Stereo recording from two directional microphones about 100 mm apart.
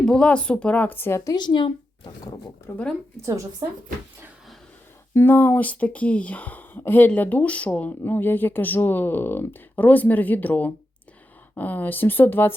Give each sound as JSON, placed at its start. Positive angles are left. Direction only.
{"t": 0.0, "sound": "speech", "side_deg": 10}
{"t": 1.2, "sound": "a woman's voice", "side_deg": 45}
{"t": 2.7, "sound": "speech", "side_deg": 25}
{"t": 3.2, "sound": "a woman's voice", "side_deg": -30}
{"t": 5.1, "sound": "speech", "side_deg": 20}